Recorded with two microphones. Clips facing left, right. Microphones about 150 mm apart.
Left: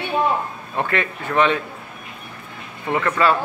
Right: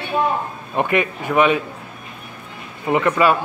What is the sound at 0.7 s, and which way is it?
Speech, 15° right (ahead or behind).